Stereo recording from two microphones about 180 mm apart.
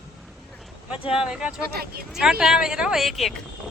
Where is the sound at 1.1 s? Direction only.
5° right (ahead or behind).